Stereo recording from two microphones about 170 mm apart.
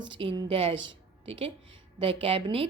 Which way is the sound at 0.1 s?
30° right (ahead or behind).